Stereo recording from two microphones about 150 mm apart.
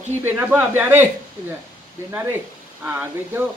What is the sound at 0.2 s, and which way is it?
Speech, 10° right (ahead or behind).